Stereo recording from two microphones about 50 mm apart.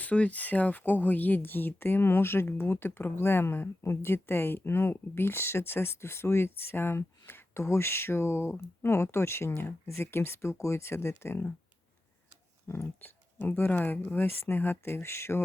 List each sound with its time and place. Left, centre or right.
0.0 s speech: left
7.6 s speech: left
12.6 s speech: left
13.0 s speech: left